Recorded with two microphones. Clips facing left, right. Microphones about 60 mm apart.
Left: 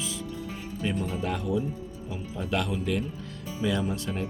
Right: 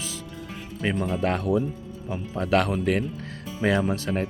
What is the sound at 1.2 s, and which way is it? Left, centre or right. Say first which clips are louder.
Speech: right 6 dB; right.